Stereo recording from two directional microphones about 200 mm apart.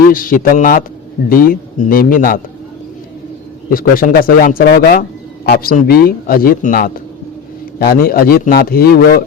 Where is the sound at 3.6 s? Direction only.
45° left (ahead or behind).